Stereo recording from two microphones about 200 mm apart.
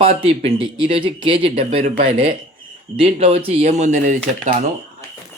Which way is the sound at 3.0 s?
30° right (ahead or behind).